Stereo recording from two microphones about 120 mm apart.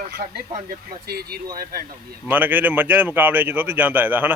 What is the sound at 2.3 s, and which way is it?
Speech, 15° right (ahead or behind).